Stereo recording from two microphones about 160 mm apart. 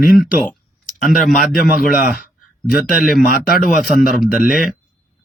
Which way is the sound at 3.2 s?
70° left (ahead or behind).